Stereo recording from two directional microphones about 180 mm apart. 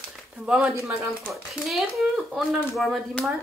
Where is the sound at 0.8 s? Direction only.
15° right (ahead or behind).